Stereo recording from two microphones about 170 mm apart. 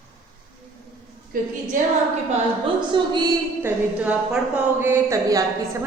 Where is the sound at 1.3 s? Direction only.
55° right (ahead or behind).